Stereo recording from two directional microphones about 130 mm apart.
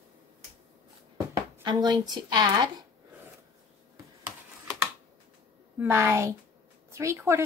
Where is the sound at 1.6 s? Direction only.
35° right (ahead or behind).